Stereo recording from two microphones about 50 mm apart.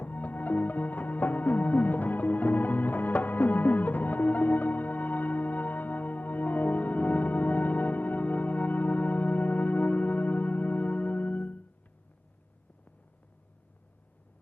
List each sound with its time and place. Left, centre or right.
0.0 s music: left